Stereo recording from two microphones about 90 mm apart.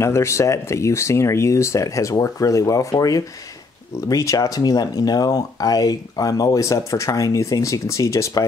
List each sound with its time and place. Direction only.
0.0 s speech: 30° left (ahead or behind)